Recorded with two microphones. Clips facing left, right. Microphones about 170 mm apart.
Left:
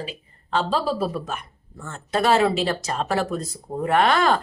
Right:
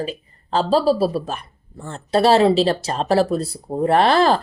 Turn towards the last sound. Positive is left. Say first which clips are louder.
# right 4 dB
turn(degrees=-30)  # may be behind; listen again after turning